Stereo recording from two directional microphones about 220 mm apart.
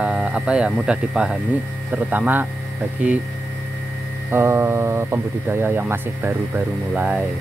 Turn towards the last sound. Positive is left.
turn(degrees=-5)  # may be behind; listen again after turning